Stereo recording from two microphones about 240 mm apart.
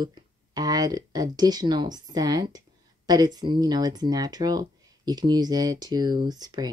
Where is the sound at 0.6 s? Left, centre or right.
Centre.